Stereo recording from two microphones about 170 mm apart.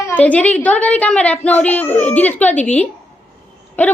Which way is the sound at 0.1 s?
10° left (ahead or behind).